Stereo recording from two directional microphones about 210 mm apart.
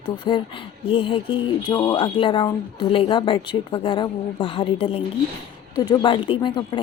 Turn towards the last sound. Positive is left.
turn(degrees=20)  # may be behind; listen again after turning